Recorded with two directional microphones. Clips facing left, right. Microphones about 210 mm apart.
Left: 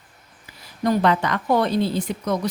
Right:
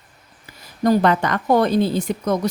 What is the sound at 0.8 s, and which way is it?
Speech, 45° right (ahead or behind).